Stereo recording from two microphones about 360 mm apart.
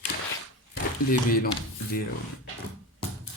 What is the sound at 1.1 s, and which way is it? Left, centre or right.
Speech, left.